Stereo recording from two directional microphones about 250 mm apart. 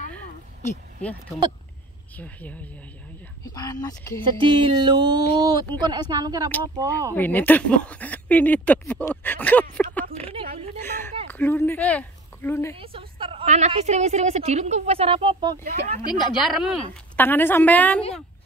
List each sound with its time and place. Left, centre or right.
2.1 s speech: centre
4.2 s a woman's voice: centre
7.2 s speech: centre
10.9 s speech: centre
12.7 s a woman's voice: right
16.1 s a woman's voice: centre